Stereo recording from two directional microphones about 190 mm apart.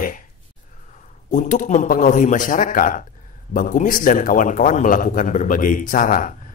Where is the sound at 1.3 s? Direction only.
40° left (ahead or behind).